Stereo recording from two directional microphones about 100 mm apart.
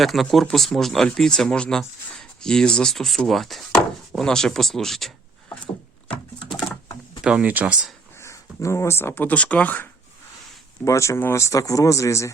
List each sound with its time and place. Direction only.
0.0 s speech: centre (ahead or behind)
7.3 s speech: 15° right (ahead or behind)
8.2 s speech: 30° left (ahead or behind)
10.8 s speech: 30° left (ahead or behind)